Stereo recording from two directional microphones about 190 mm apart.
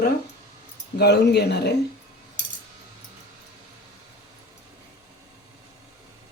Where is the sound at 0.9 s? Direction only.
60° left (ahead or behind).